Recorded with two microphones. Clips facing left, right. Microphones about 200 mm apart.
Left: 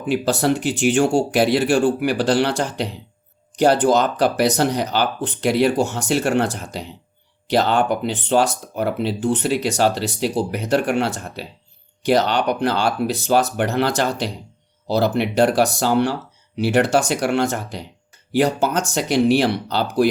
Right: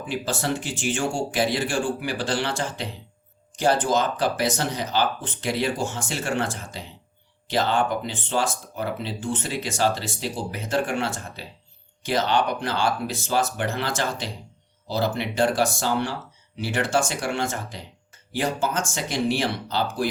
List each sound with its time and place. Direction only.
0.0 s speech: 65° left (ahead or behind)